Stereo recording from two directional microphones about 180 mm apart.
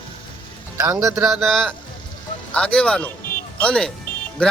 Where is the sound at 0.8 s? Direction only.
20° right (ahead or behind).